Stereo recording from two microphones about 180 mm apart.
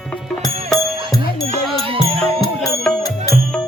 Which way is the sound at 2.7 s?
Centre (ahead or behind).